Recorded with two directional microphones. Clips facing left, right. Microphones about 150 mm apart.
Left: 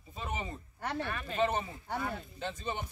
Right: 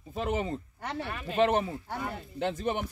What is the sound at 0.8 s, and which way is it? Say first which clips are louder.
Speech: left 1 dB; 10° right (ahead or behind).